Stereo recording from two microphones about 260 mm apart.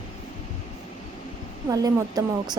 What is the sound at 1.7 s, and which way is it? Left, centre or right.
Speech, centre.